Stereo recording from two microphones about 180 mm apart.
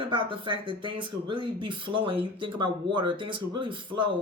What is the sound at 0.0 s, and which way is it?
Speech, 25° right (ahead or behind).